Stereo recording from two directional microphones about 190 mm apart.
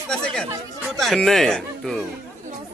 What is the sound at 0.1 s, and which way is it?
A man's voice, 5° left (ahead or behind).